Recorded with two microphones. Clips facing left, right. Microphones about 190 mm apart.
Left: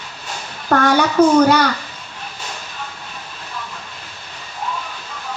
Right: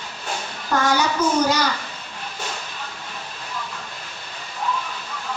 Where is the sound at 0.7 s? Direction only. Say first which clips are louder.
Left 5 dB; 60° left (ahead or behind).